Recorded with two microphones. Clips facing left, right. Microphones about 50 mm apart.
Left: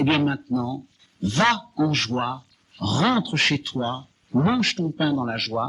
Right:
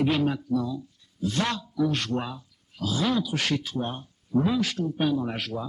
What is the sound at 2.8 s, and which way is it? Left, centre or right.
Speech, left.